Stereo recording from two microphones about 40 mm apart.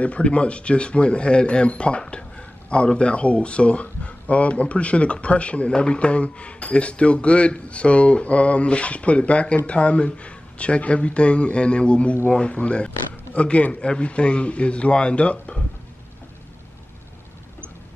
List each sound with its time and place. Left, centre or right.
0.0 s speech: left